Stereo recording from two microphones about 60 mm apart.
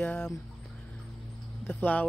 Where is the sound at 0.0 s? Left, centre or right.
Left.